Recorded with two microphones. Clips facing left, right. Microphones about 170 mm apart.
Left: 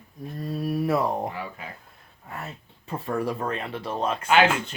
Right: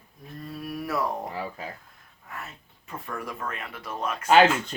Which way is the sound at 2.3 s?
35° left (ahead or behind).